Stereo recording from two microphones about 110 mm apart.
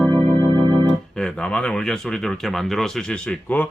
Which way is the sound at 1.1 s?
5° left (ahead or behind).